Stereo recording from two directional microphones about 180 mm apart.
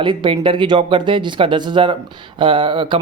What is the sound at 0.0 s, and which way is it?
Speech, 30° right (ahead or behind).